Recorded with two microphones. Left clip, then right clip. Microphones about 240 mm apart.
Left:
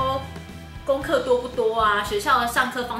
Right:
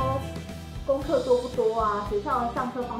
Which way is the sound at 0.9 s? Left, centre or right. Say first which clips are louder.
Left 2 dB; centre.